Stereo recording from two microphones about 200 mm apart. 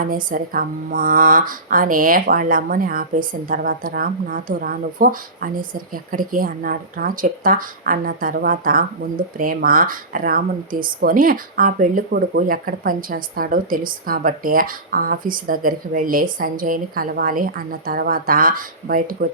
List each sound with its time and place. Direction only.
0.0 s speech: 45° right (ahead or behind)